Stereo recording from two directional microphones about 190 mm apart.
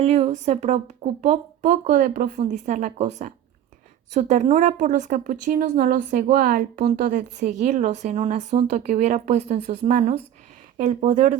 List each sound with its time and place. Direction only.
0.0 s a woman's voice: 35° right (ahead or behind)